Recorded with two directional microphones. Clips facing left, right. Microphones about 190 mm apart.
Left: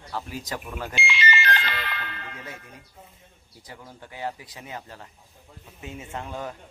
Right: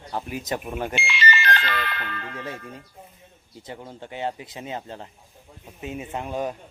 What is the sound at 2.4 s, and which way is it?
Speech, 30° right (ahead or behind).